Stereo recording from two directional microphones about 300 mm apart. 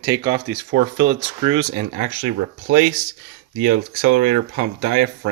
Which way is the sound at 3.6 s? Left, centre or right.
Right.